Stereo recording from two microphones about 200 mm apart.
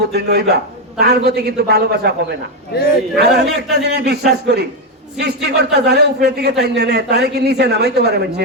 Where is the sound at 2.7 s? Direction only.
55° left (ahead or behind).